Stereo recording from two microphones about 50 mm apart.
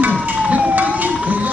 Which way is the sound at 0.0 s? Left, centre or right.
Right.